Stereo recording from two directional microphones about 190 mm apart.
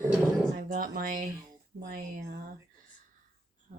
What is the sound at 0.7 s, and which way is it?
Speech, 45° right (ahead or behind).